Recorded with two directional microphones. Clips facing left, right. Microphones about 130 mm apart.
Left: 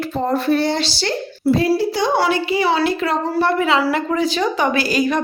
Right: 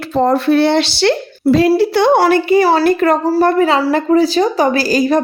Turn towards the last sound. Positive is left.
turn(degrees=-35)  # may be behind; listen again after turning